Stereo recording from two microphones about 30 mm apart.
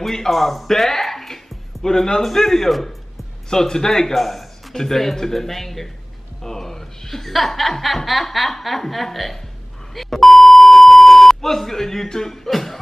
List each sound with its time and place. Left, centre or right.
0.0 s speech: centre
0.3 s music: centre; by 2.2 s left
2.2 s speech: centre
4.1 s speech: centre
9.9 s beep: centre
12.4 s speech: centre